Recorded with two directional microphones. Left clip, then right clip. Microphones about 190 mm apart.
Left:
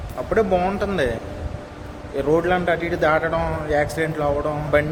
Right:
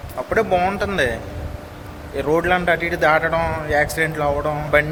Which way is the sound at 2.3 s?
5° left (ahead or behind).